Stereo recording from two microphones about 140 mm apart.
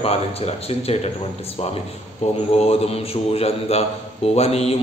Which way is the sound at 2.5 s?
45° left (ahead or behind).